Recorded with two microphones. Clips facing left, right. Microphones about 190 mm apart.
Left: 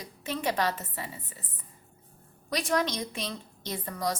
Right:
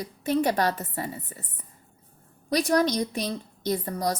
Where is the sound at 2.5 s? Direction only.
35° right (ahead or behind).